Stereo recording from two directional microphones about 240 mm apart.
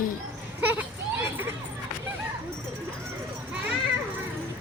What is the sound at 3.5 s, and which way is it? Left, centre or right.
Children playing, centre.